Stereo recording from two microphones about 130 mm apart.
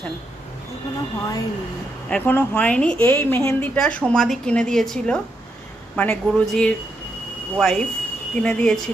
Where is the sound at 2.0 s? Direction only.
10° left (ahead or behind).